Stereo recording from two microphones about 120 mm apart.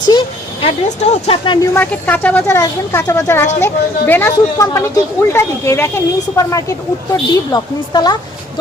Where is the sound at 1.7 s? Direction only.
15° left (ahead or behind).